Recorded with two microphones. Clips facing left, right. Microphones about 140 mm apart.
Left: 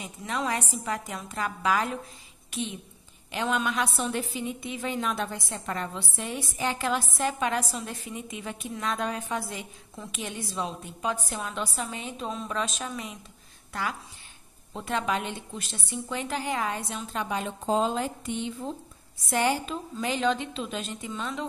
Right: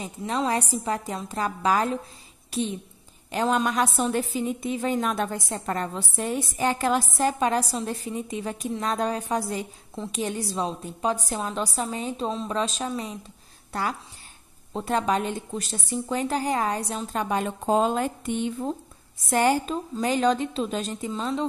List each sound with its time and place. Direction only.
0.0 s a woman's voice: 30° right (ahead or behind)